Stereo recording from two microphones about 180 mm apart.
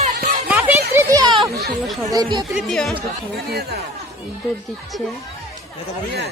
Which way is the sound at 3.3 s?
60° right (ahead or behind).